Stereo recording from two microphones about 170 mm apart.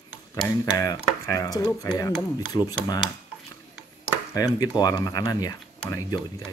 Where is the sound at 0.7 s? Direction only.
20° left (ahead or behind).